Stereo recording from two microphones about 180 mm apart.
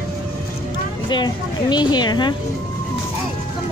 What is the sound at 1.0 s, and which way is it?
Speech, 25° left (ahead or behind).